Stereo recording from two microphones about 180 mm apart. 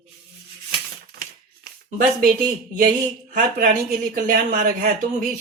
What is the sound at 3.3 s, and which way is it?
Speech, 50° right (ahead or behind).